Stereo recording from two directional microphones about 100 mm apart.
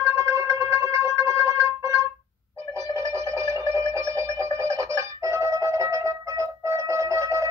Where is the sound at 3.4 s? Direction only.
30° right (ahead or behind).